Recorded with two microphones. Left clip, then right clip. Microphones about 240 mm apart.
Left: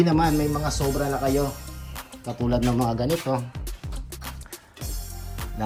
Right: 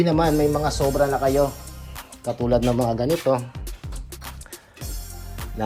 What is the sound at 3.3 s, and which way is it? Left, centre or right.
Speech, right.